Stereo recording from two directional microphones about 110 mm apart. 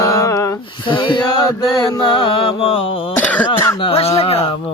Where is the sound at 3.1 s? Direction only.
15° left (ahead or behind).